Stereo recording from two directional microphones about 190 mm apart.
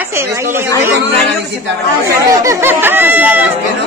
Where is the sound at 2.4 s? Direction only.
10° right (ahead or behind).